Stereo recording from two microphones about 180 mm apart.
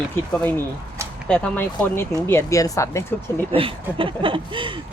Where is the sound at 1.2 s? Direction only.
5° left (ahead or behind).